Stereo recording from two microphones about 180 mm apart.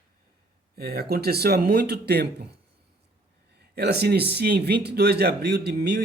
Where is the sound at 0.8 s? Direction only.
60° right (ahead or behind).